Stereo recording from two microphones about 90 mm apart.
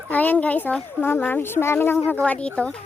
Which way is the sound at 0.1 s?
15° left (ahead or behind).